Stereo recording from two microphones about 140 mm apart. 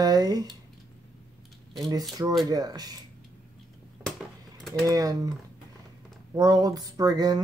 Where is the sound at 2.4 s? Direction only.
30° right (ahead or behind).